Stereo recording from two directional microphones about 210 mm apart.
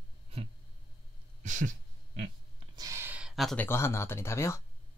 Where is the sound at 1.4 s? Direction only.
35° right (ahead or behind).